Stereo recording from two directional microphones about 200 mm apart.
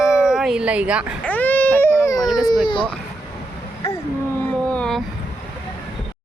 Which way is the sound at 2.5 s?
25° left (ahead or behind).